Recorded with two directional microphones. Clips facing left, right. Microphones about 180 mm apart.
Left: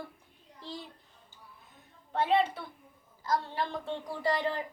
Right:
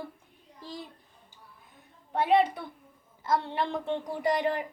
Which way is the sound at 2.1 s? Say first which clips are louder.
Right 3 dB; 15° right (ahead or behind).